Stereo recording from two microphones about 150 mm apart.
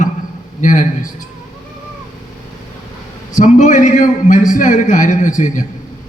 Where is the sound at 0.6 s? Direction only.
60° left (ahead or behind).